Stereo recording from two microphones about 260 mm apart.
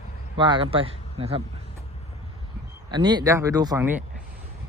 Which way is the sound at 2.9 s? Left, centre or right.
Centre.